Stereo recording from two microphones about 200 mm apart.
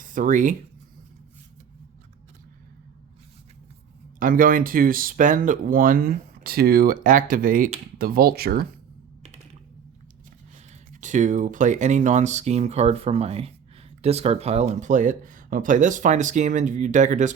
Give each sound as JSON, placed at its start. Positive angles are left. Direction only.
{"t": 0.0, "sound": "speech", "side_deg": -40}
{"t": 4.2, "sound": "speech", "side_deg": -45}
{"t": 11.0, "sound": "speech", "side_deg": -40}